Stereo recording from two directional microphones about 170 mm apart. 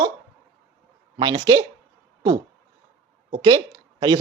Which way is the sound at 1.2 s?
25° right (ahead or behind).